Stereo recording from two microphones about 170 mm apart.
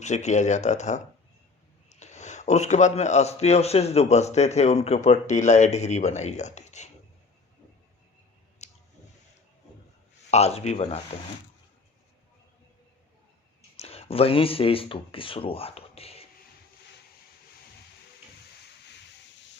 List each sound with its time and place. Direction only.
0.0 s a man's voice: 45° left (ahead or behind)
8.6 s a sound: 40° left (ahead or behind)
10.3 s a man's voice: 40° left (ahead or behind)
13.7 s speech: 35° left (ahead or behind)